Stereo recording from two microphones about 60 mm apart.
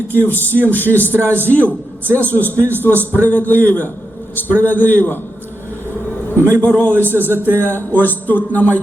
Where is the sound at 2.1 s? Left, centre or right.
Left.